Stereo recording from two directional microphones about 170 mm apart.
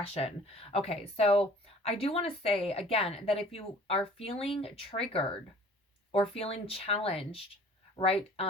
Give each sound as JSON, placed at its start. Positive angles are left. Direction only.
{"t": 0.0, "sound": "speech", "side_deg": 35}